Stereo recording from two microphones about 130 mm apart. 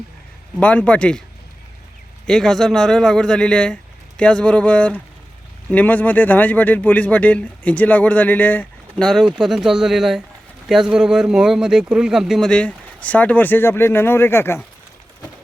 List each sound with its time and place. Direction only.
0.6 s speech: 10° left (ahead or behind)
2.2 s a man's voice: 5° left (ahead or behind)